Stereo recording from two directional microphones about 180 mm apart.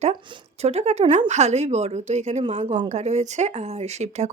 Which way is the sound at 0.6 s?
35° right (ahead or behind).